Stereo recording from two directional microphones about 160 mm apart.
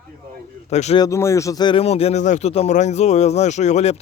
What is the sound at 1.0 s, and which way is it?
Speech, 15° left (ahead or behind).